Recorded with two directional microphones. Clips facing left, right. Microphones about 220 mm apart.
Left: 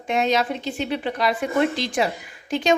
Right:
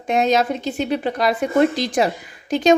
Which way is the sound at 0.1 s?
45° right (ahead or behind).